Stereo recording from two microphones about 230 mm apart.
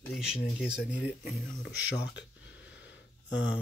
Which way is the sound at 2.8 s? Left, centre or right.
Left.